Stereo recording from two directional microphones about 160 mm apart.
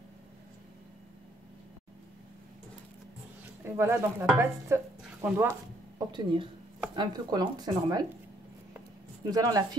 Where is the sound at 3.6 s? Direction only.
15° right (ahead or behind).